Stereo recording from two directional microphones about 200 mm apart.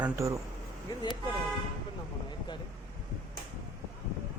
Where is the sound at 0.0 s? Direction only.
15° right (ahead or behind).